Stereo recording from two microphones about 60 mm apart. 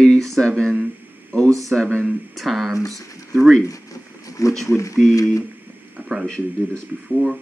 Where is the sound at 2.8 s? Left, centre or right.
Left.